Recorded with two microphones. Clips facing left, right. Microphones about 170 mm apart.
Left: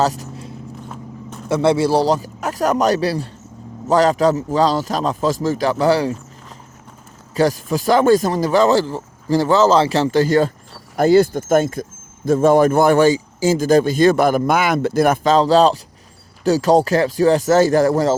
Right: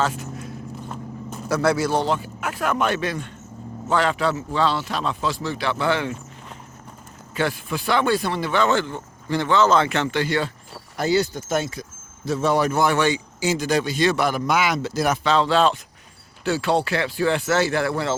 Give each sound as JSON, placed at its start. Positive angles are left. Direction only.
{"t": 0.0, "sound": "speech", "side_deg": 35}
{"t": 0.9, "sound": "vehicle", "side_deg": -5}
{"t": 1.5, "sound": "speech", "side_deg": 25}
{"t": 7.3, "sound": "speech", "side_deg": 40}